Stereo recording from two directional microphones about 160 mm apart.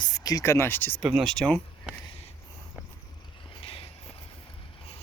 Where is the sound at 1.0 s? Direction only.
Centre (ahead or behind).